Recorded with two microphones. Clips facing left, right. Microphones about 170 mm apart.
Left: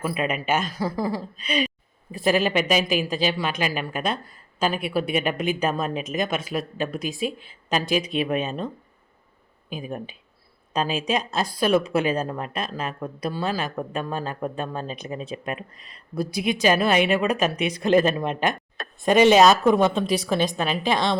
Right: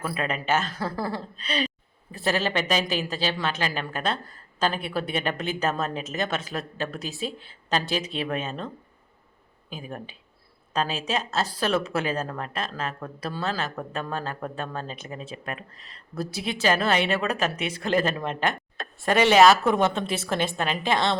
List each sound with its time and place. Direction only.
0.0 s speech: 15° left (ahead or behind)